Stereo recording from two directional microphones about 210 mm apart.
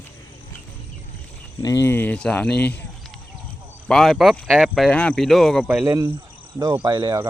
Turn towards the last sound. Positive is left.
turn(degrees=-20)  # may be behind; listen again after turning